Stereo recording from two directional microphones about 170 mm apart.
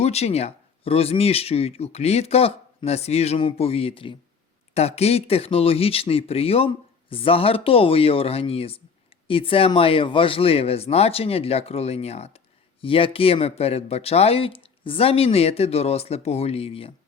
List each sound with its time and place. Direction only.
0.0 s speech: 40° left (ahead or behind)